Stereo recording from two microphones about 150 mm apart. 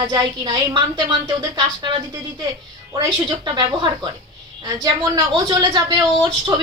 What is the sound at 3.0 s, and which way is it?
Speech, 30° right (ahead or behind).